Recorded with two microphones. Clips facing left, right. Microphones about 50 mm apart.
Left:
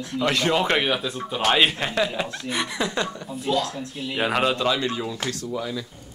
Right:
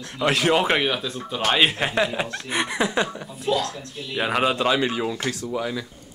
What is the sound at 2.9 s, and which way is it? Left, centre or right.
Speech, centre.